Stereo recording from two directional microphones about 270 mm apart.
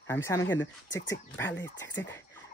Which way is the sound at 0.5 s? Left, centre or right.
Left.